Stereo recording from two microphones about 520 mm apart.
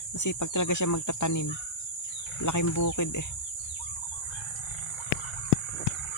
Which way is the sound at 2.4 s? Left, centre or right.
Left.